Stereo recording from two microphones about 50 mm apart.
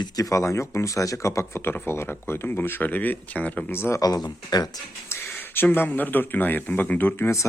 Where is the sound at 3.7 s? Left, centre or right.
Left.